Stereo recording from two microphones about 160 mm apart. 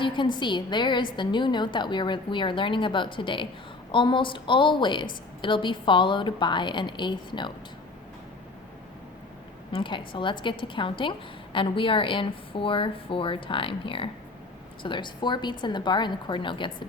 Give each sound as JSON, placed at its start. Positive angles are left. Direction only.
{"t": 0.0, "sound": "a woman's voice", "side_deg": 30}
{"t": 9.7, "sound": "a woman's voice", "side_deg": 30}